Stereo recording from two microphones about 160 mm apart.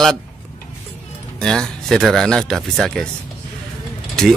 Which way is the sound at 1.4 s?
5° left (ahead or behind).